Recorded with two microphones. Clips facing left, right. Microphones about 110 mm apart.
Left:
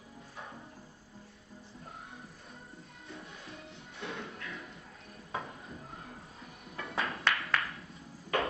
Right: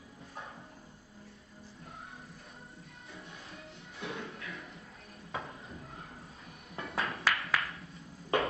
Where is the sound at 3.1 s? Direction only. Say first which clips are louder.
Left 2 dB; 30° left (ahead or behind).